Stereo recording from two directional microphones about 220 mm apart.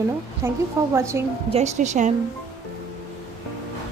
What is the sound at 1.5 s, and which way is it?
Speech, 30° right (ahead or behind).